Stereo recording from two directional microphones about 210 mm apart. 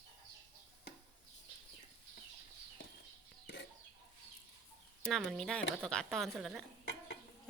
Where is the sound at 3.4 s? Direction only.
50° left (ahead or behind).